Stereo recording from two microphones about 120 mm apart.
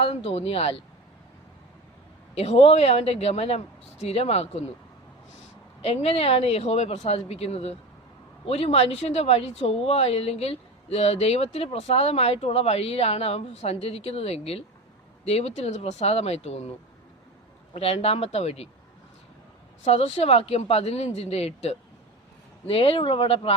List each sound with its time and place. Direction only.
0.0 s speech: 55° left (ahead or behind)
2.3 s speech: 60° left (ahead or behind)
5.8 s speech: 55° left (ahead or behind)
17.7 s speech: 55° left (ahead or behind)
19.8 s speech: 60° left (ahead or behind)